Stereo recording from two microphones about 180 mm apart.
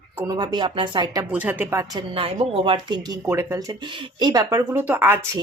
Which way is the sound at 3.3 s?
15° right (ahead or behind).